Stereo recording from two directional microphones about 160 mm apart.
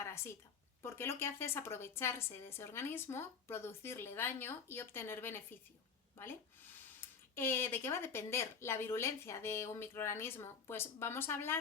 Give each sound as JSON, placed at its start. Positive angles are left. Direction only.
{"t": 0.0, "sound": "a sound", "side_deg": 15}
{"t": 0.8, "sound": "a woman's voice", "side_deg": 15}
{"t": 7.3, "sound": "a woman's voice", "side_deg": 15}